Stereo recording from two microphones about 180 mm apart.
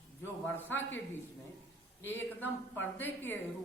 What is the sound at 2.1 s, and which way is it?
Speech, 10° left (ahead or behind).